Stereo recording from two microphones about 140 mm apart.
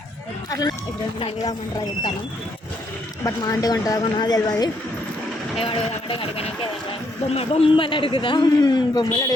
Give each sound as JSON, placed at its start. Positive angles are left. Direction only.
{"t": 3.2, "sound": "speech", "side_deg": 25}
{"t": 5.5, "sound": "a man's voice", "side_deg": 40}